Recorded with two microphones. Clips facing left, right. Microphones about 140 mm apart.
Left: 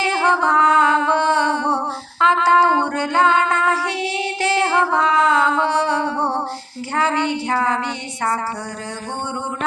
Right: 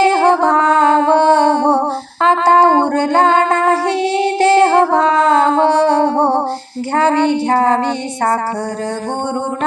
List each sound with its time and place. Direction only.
0.0 s music: 55° right (ahead or behind)
2.2 s female singing: 55° right (ahead or behind)
6.9 s a sound: 55° right (ahead or behind)